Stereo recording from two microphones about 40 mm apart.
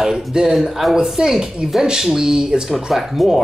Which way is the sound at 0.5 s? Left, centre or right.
Centre.